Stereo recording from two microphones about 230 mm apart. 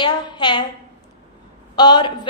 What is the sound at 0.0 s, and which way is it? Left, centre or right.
Speech, centre.